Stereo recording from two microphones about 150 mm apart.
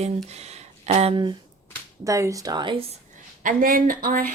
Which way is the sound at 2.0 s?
20° right (ahead or behind).